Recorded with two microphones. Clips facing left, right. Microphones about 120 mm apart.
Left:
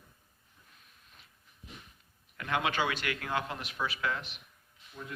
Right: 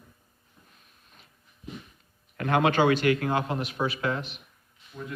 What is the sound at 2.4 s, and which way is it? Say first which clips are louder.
Speech: right 9 dB; 45° right (ahead or behind).